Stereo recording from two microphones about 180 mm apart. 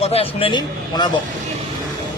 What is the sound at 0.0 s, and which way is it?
A man's voice, 35° left (ahead or behind).